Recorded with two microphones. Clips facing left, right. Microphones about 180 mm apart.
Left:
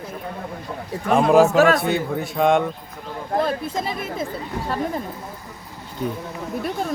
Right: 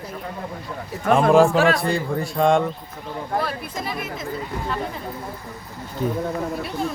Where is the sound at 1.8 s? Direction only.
Centre (ahead or behind).